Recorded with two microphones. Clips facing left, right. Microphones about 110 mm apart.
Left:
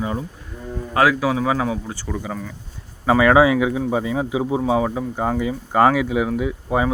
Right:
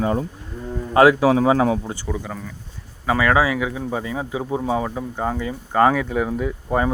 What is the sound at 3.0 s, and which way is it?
Speech, 20° left (ahead or behind).